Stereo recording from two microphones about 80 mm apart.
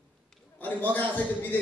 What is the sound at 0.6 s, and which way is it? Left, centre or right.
A man's voice, left.